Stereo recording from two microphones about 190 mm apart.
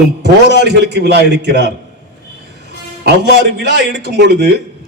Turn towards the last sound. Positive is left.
turn(degrees=-65)  # may be behind; listen again after turning